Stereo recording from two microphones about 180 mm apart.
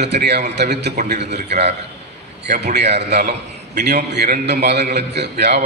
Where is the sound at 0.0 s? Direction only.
70° right (ahead or behind).